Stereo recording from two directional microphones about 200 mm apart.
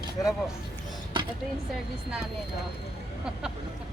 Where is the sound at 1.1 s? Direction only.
25° right (ahead or behind).